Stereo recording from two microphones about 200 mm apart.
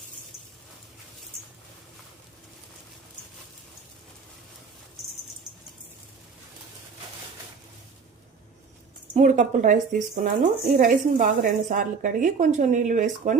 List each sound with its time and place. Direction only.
9.1 s a woman's voice: 35° right (ahead or behind)